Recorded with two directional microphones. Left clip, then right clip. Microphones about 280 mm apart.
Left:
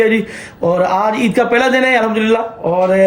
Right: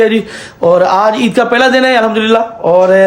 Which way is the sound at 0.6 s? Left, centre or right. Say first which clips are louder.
Right 6 dB; centre.